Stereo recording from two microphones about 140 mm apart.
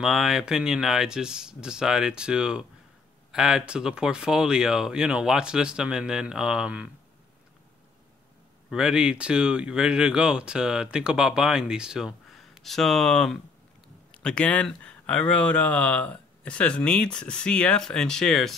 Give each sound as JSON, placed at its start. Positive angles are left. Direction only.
{"t": 0.0, "sound": "speech", "side_deg": 0}
{"t": 8.6, "sound": "speech", "side_deg": -5}